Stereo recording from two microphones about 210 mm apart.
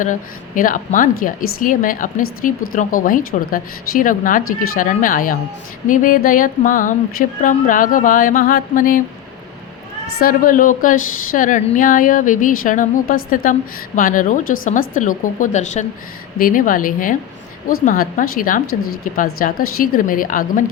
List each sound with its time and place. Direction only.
0.0 s a woman's voice: 40° left (ahead or behind)
10.2 s a woman's voice: 40° left (ahead or behind)